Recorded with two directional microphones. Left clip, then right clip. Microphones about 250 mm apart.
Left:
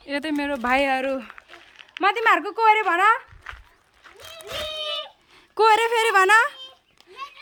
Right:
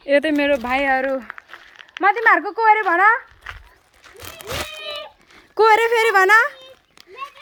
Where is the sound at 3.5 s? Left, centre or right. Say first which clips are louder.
Right 4 dB; right.